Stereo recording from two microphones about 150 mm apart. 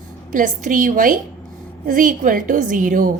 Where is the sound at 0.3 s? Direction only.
60° right (ahead or behind).